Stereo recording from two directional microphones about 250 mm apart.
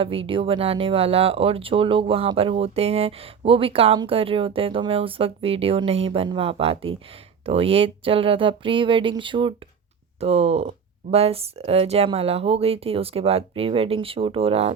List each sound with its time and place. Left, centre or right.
0.0 s speech: right